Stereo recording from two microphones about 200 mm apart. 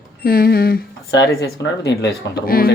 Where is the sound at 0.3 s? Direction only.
45° left (ahead or behind).